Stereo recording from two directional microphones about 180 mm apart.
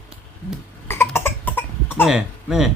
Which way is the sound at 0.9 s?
15° left (ahead or behind).